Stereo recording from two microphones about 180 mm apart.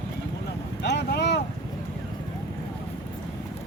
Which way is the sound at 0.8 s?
70° left (ahead or behind).